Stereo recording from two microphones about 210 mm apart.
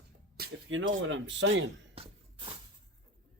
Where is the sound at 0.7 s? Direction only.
65° right (ahead or behind).